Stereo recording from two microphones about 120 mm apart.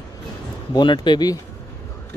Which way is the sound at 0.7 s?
40° left (ahead or behind).